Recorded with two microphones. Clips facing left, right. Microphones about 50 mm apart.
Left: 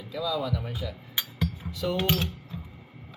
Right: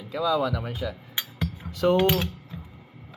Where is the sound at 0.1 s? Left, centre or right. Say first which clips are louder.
Right 5 dB; right.